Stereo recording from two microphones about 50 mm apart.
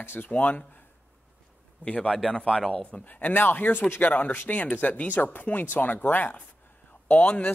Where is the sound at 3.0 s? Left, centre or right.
Left.